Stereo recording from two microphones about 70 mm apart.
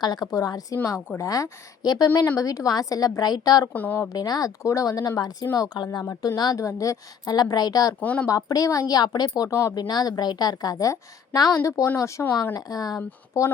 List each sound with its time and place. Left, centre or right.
0.0 s a woman's voice: left
2.4 s a woman's voice: left
3.7 s a woman's voice: left
4.1 s a woman's voice: left
5.5 s a woman's voice: left
7.3 s a woman's voice: left
8.0 s a woman's voice: left
8.3 s a woman's voice: left
8.9 s a woman's voice: left
9.5 s speech: left
9.7 s a woman's voice: left
11.5 s speech: left
12.5 s a woman's voice: left
13.4 s speech: left